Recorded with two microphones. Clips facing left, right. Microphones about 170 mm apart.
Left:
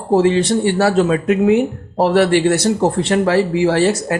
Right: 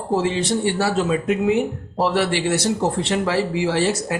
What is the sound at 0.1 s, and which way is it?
Speech, 60° left (ahead or behind).